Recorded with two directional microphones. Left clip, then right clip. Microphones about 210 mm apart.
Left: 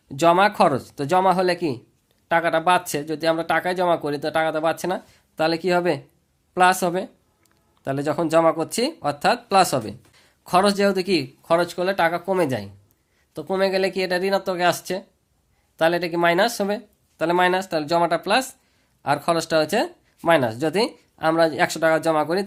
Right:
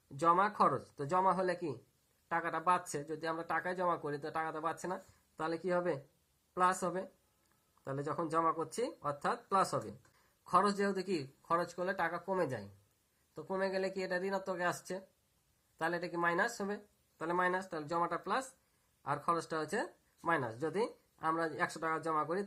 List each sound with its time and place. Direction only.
0.2 s speech: 50° left (ahead or behind)